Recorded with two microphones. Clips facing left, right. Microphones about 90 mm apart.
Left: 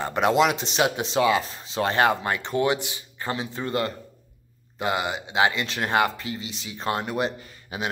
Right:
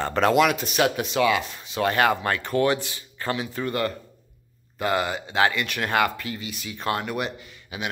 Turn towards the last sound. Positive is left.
turn(degrees=35)  # may be behind; listen again after turning